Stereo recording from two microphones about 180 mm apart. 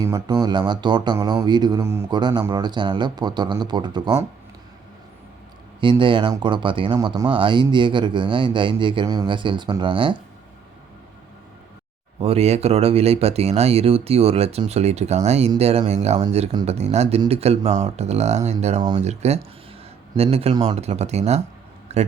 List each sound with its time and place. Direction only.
0.0 s a man's voice: 20° right (ahead or behind)
5.8 s a man's voice: 25° right (ahead or behind)
12.2 s speech: 35° right (ahead or behind)
18.8 s a man's voice: 25° right (ahead or behind)
19.0 s speech: 35° right (ahead or behind)